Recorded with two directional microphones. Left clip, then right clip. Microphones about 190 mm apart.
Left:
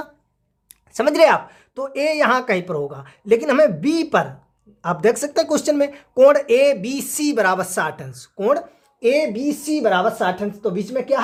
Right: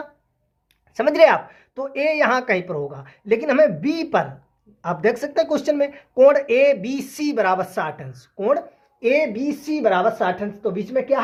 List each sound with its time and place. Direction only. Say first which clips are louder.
0.9 s speech: even; 25° left (ahead or behind)